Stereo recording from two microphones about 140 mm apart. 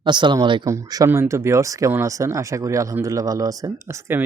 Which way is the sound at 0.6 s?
25° right (ahead or behind).